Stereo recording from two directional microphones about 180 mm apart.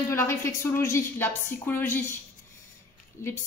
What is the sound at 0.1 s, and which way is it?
A woman's voice, 15° left (ahead or behind).